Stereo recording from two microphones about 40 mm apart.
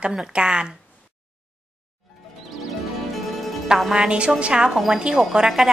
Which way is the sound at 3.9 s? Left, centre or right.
Right.